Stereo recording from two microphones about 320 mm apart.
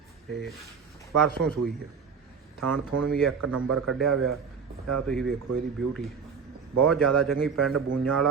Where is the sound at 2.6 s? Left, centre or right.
Right.